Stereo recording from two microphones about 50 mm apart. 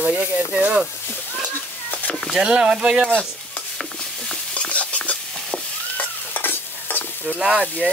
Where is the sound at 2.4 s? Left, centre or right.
Centre.